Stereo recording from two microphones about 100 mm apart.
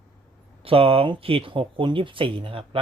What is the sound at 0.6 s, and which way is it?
Speech, 70° right (ahead or behind).